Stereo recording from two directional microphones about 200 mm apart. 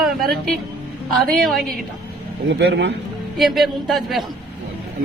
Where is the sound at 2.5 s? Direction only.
55° right (ahead or behind).